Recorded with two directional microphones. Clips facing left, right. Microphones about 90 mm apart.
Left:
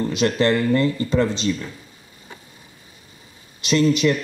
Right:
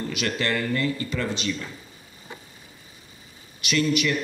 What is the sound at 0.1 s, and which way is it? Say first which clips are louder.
Speech: left 8 dB; 30° left (ahead or behind).